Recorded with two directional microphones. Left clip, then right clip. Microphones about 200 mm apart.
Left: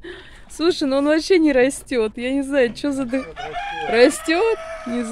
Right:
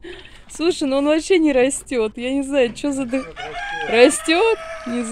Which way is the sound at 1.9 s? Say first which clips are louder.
Even; 5° right (ahead or behind).